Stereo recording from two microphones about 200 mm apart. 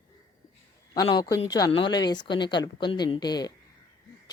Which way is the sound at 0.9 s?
20° left (ahead or behind).